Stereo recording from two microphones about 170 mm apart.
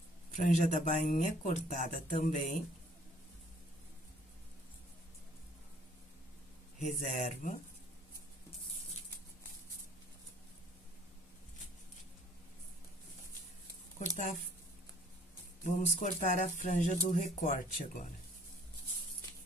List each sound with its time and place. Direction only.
0.3 s speech: 45° left (ahead or behind)
6.8 s speech: 45° left (ahead or behind)
15.6 s speech: 50° left (ahead or behind)